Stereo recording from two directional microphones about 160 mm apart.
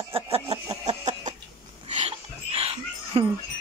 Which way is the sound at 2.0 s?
40° right (ahead or behind).